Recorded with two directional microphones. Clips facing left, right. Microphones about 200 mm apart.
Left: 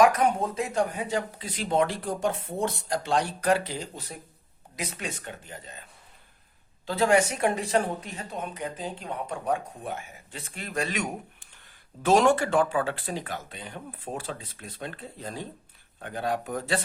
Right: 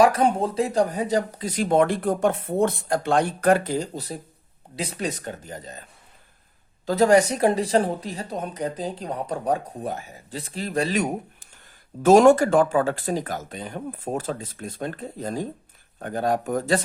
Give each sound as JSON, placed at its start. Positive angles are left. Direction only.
{"t": 0.0, "sound": "a woman's voice", "side_deg": -30}
{"t": 6.8, "sound": "a woman's voice", "side_deg": -40}